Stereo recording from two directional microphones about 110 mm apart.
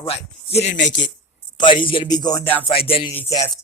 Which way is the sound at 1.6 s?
45° left (ahead or behind).